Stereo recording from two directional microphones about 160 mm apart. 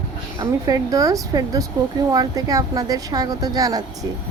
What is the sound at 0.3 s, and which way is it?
A woman's voice, 20° right (ahead or behind).